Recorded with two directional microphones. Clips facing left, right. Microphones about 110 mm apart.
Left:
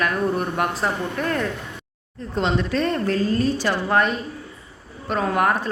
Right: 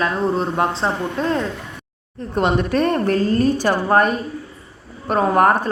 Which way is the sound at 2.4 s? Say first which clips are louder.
Right 4 dB; 55° right (ahead or behind).